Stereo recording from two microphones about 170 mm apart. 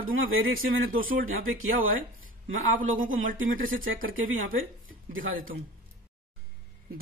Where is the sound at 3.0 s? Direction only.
55° right (ahead or behind).